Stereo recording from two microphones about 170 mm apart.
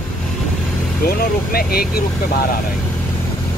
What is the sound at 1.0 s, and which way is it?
Speech, 60° left (ahead or behind).